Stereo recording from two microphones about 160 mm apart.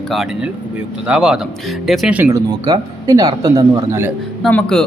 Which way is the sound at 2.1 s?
10° right (ahead or behind).